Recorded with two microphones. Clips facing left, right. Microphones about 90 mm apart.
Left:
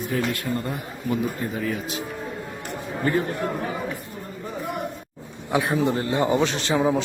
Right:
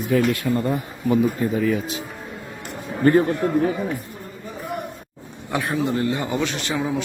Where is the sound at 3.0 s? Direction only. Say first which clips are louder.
Right 8 dB; 45° right (ahead or behind).